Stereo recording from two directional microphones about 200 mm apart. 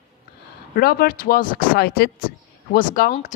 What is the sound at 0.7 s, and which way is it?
Speech, 50° left (ahead or behind).